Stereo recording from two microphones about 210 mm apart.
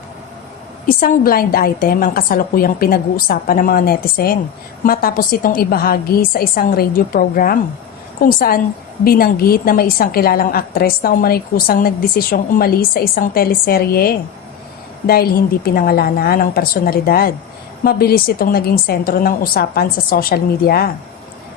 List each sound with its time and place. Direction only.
0.9 s a woman's voice: 40° left (ahead or behind)